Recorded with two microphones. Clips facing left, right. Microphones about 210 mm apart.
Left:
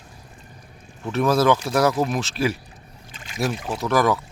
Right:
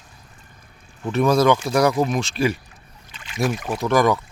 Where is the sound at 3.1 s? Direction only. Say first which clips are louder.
Right 2 dB; 40° left (ahead or behind).